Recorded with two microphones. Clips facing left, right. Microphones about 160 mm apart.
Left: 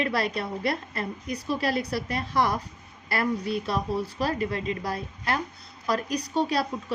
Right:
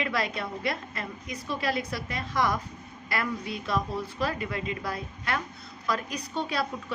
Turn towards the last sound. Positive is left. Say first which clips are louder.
# left 6 dB
turn(degrees=35)  # may be behind; listen again after turning